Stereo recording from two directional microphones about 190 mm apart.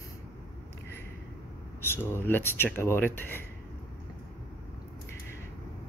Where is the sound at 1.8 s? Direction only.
10° left (ahead or behind).